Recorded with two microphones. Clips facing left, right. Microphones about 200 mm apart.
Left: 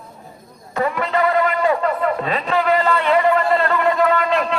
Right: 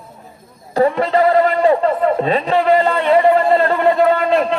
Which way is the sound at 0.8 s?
30° right (ahead or behind).